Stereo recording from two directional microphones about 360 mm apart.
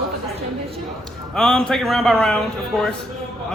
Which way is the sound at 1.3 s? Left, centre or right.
Centre.